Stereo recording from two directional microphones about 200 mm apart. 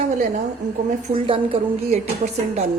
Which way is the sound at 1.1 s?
30° right (ahead or behind).